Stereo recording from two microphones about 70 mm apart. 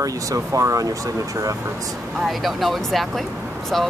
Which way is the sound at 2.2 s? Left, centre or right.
Centre.